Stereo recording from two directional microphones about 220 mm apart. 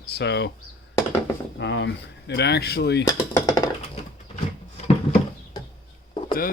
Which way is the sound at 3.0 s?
15° left (ahead or behind).